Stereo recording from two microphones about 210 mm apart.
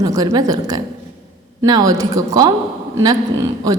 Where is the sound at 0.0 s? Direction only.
15° right (ahead or behind).